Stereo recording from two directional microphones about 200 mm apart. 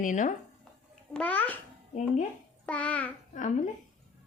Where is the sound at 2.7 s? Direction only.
5° left (ahead or behind).